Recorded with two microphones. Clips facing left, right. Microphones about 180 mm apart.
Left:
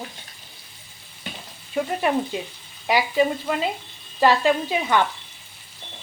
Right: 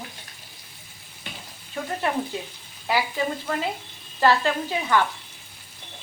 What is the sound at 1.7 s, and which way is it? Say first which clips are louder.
Speech: left 5 dB; 15° left (ahead or behind).